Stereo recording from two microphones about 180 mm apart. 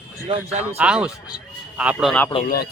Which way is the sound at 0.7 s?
5° right (ahead or behind).